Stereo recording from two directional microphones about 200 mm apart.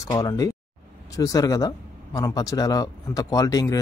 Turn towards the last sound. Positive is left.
turn(degrees=15)  # may be behind; listen again after turning